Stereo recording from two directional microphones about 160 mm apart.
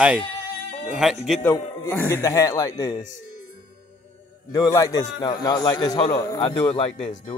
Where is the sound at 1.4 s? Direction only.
15° left (ahead or behind).